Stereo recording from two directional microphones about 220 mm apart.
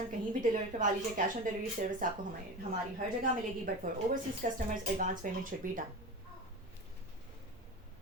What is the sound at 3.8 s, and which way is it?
A woman's voice, 40° right (ahead or behind).